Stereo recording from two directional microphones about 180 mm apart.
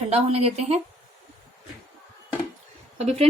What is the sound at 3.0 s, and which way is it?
Speech, 35° right (ahead or behind).